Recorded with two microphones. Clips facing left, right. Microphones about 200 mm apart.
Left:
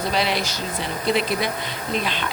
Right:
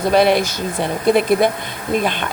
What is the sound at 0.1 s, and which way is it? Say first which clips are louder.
Speech: right 13 dB; 55° right (ahead or behind).